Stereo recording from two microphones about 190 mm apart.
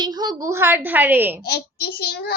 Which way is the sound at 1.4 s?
55° left (ahead or behind).